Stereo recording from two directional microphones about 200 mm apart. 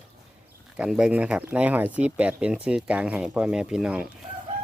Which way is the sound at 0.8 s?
5° right (ahead or behind).